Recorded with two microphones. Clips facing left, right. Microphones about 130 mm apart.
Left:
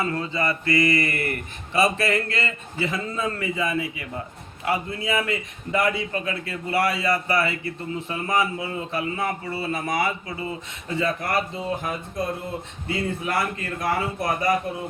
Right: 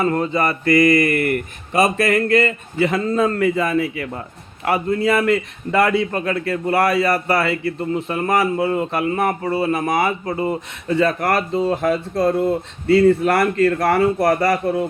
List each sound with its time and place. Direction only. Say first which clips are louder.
0.0 s speech: right 7 dB; 50° right (ahead or behind)
0.6 s mantra: right 9 dB; 25° left (ahead or behind)
1.3 s speech: right 8 dB; 50° right (ahead or behind); by 14.6 s 70° right (ahead or behind)